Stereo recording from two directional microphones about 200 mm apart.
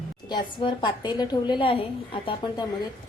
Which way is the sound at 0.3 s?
25° left (ahead or behind).